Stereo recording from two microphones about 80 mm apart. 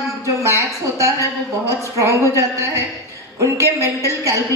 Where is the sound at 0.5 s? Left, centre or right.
Right.